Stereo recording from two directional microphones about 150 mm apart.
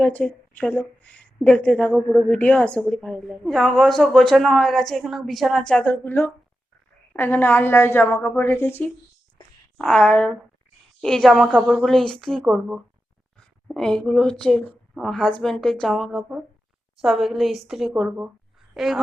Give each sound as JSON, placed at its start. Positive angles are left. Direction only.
{"t": 0.0, "sound": "a woman's voice", "side_deg": 10}
{"t": 9.7, "sound": "a woman's voice", "side_deg": 5}